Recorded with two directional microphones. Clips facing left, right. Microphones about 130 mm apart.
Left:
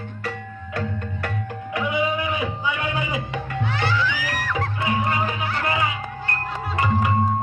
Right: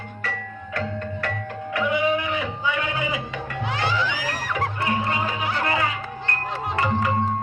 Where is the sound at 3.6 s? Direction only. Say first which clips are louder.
Even; 15° right (ahead or behind).